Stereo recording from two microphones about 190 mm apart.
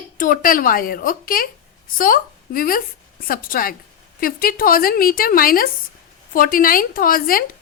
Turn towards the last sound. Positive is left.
turn(degrees=50)  # may be behind; listen again after turning